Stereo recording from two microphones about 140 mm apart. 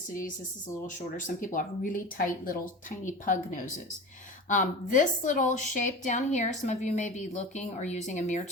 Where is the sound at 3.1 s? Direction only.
65° left (ahead or behind).